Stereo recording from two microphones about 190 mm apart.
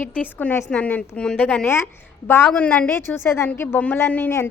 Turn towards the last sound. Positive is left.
turn(degrees=10)  # may be behind; listen again after turning